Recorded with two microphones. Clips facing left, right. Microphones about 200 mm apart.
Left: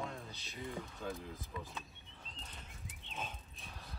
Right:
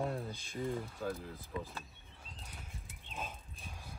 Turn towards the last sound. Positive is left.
turn(degrees=0)  # may be behind; listen again after turning